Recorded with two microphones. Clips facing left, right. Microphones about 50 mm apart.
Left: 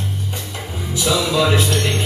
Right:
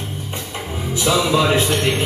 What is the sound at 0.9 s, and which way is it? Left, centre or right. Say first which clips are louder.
Music: right 2 dB; right.